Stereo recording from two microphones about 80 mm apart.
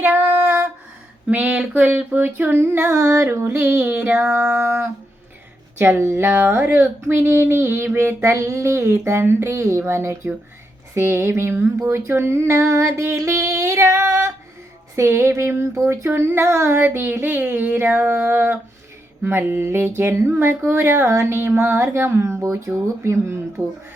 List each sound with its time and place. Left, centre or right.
0.0 s music: right
1.3 s a sound: centre
7.9 s speech: right